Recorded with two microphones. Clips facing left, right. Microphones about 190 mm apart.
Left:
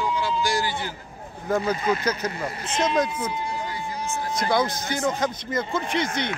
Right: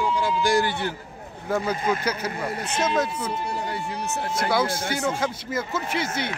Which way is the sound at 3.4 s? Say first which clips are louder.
Right 1 dB; 65° right (ahead or behind).